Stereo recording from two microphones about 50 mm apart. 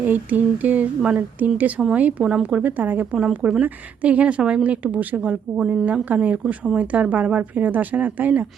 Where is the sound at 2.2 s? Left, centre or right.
Centre.